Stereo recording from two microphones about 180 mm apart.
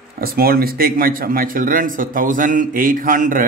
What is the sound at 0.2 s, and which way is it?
A man's voice, 55° right (ahead or behind).